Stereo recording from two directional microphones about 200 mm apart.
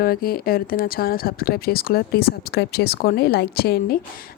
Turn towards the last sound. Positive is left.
turn(degrees=50)  # may be behind; listen again after turning